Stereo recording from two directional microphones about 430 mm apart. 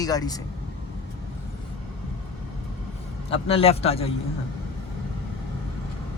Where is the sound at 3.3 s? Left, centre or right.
Centre.